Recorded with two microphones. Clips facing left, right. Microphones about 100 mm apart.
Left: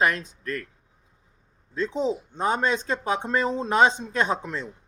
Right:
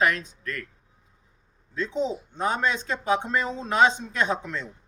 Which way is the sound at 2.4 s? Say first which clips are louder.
Left 1 dB; 30° left (ahead or behind).